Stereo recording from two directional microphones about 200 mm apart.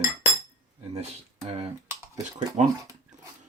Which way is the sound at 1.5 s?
30° right (ahead or behind).